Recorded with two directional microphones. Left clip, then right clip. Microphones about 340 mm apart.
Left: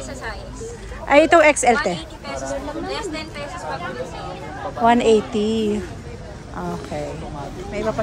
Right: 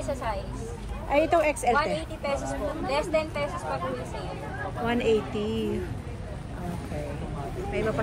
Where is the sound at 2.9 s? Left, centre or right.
Centre.